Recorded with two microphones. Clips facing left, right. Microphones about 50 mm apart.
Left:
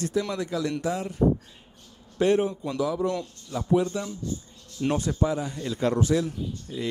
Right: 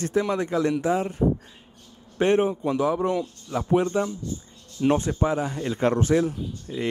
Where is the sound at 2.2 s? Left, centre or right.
Right.